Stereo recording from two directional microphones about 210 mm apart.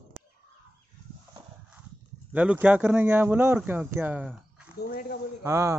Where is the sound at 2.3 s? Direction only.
5° right (ahead or behind).